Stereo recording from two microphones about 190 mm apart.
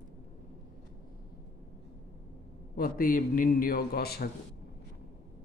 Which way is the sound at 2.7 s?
50° left (ahead or behind).